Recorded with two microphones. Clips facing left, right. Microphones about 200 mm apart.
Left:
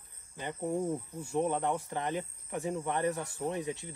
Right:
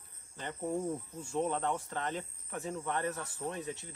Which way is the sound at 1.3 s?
15° left (ahead or behind).